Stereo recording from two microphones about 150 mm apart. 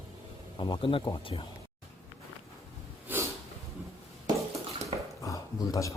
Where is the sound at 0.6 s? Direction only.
35° left (ahead or behind).